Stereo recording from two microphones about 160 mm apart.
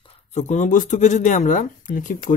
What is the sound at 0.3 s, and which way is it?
Speech, 45° left (ahead or behind).